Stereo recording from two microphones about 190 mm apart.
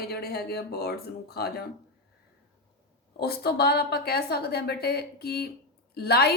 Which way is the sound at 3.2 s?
55° left (ahead or behind).